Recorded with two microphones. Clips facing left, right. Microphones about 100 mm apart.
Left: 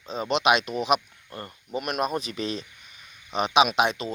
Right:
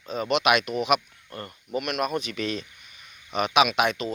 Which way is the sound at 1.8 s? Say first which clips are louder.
Even; 35° left (ahead or behind).